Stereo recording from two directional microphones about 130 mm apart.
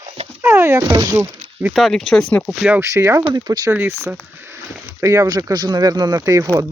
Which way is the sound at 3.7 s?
20° right (ahead or behind).